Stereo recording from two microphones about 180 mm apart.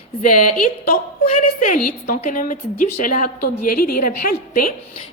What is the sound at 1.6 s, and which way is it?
A woman's voice, 45° left (ahead or behind).